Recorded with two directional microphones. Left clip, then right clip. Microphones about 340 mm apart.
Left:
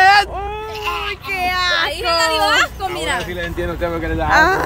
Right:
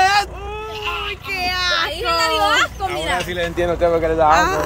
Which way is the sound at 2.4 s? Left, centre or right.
Left.